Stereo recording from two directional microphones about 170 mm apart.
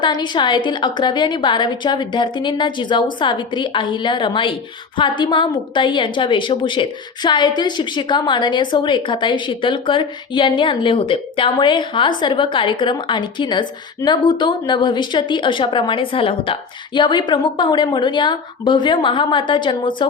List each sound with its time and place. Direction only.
0.0 s a woman's voice: 25° left (ahead or behind)